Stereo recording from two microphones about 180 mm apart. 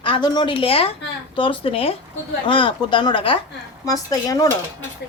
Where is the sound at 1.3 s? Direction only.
30° left (ahead or behind).